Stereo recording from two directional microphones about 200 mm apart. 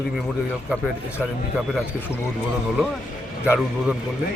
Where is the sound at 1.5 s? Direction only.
5° right (ahead or behind).